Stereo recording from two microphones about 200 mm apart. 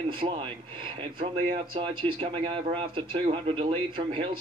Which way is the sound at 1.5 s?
25° right (ahead or behind).